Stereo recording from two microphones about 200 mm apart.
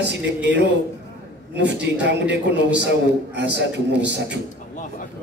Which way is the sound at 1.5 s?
60° right (ahead or behind).